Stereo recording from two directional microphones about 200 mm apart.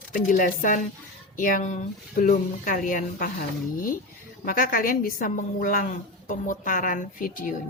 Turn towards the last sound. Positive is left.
turn(degrees=40)  # may be behind; listen again after turning